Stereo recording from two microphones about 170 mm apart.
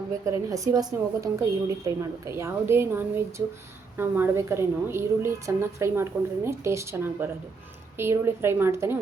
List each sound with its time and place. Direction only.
0.3 s a woman's voice: 20° right (ahead or behind)